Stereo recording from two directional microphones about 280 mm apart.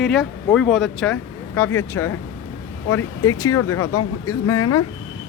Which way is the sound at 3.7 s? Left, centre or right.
Left.